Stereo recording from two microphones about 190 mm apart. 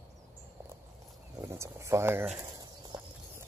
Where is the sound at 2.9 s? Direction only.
25° right (ahead or behind).